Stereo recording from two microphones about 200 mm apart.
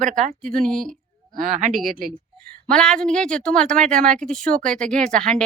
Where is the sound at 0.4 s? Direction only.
5° left (ahead or behind).